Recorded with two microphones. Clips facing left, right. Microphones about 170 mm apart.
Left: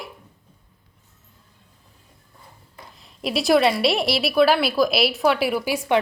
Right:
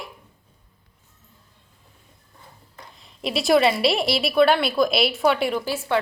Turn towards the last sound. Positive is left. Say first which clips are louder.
# left 2 dB
turn(degrees=15)  # may be behind; listen again after turning